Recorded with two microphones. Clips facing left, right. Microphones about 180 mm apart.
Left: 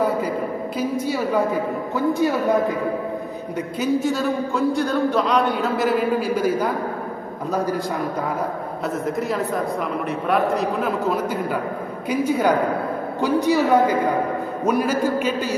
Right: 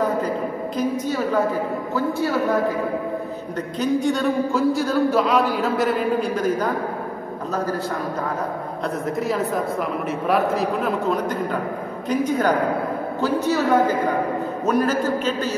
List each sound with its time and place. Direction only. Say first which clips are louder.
0.0 s a sound: left 1 dB; 10° left (ahead or behind)
0.7 s a man's voice: even; 10° left (ahead or behind)
3.5 s a man's voice: even; 5° left (ahead or behind)
9.0 s a man's voice: right 1 dB; centre (ahead or behind)